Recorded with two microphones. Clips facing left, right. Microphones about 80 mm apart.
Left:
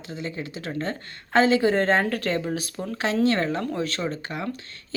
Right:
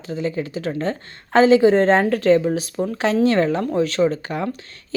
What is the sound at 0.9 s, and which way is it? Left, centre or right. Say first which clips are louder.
Speech: right 3 dB; right.